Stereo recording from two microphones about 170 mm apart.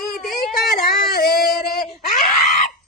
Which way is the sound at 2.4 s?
45° left (ahead or behind).